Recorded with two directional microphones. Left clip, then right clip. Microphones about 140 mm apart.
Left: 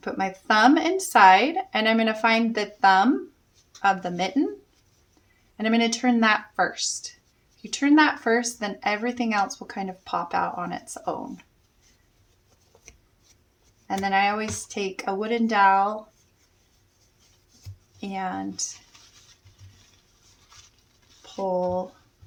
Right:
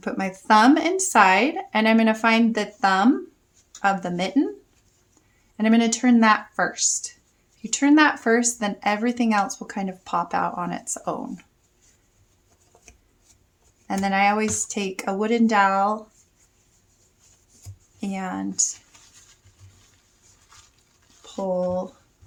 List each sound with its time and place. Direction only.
0.0 s speech: 30° right (ahead or behind)
5.5 s a woman's voice: 25° right (ahead or behind)
13.8 s a woman's voice: 35° right (ahead or behind)
18.0 s speech: 30° right (ahead or behind)